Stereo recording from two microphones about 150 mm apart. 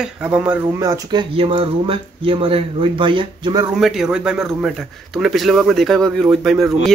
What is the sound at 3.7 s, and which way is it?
A man's voice, centre (ahead or behind).